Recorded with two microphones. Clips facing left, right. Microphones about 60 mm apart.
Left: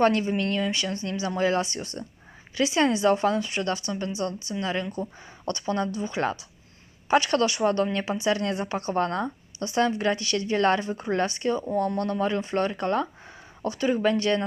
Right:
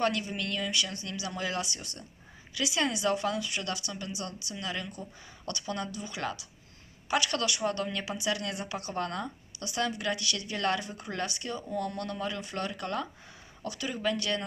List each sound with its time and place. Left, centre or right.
0.0 s a woman's voice: left